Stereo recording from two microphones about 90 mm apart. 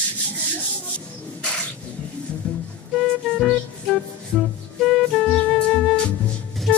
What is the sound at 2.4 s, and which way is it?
Music, 10° left (ahead or behind).